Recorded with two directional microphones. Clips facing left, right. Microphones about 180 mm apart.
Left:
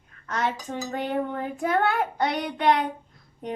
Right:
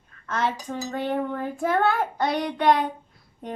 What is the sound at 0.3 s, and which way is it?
Dishes, 20° left (ahead or behind).